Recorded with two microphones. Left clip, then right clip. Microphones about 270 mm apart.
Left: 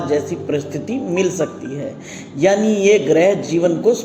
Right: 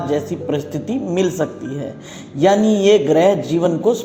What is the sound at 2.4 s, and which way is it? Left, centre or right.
Speech, right.